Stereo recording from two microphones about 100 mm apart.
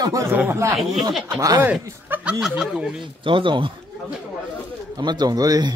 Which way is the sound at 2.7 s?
Centre (ahead or behind).